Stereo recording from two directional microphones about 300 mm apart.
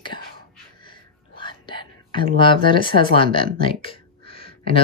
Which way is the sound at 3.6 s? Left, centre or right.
Centre.